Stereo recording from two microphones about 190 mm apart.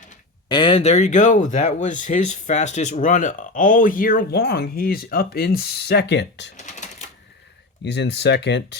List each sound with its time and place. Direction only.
0.4 s speech: 25° left (ahead or behind); by 6.5 s 65° left (ahead or behind)
7.8 s speech: 65° left (ahead or behind)